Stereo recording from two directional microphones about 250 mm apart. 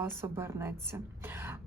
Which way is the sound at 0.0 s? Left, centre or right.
Centre.